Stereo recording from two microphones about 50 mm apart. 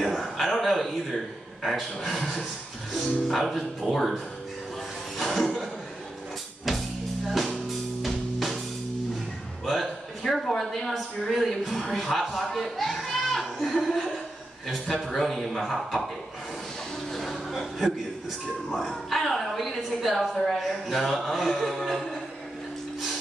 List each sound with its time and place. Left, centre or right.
0.0 s a man's voice: centre
5.1 s music: centre
7.2 s music: centre
9.7 s a sound: centre
11.8 s a woman's voice: centre
12.5 s a sound: centre
14.7 s a woman's voice: centre
17.1 s a sound: centre
18.7 s a woman's voice: centre